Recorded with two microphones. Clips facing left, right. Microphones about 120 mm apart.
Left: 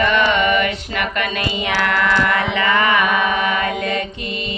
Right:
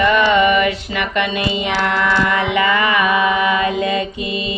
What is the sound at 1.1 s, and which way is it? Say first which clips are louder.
Speech: right 3 dB; 20° right (ahead or behind).